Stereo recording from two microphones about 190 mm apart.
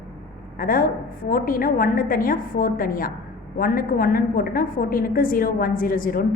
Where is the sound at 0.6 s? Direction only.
50° left (ahead or behind).